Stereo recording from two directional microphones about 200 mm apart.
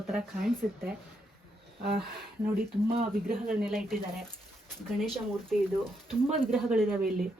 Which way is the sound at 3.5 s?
5° right (ahead or behind).